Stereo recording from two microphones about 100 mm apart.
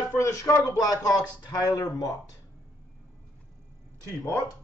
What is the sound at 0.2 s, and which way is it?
A man's voice, 30° left (ahead or behind).